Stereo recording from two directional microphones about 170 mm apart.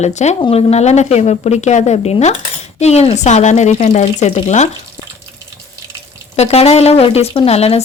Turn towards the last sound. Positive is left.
turn(degrees=40)  # may be behind; listen again after turning